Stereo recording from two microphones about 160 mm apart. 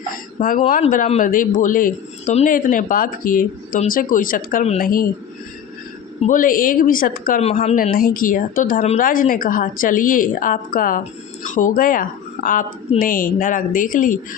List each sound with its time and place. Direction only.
0.3 s speech: 60° left (ahead or behind)
6.2 s speech: 55° left (ahead or behind)
7.4 s speech: 40° left (ahead or behind)
7.9 s speech: 60° left (ahead or behind)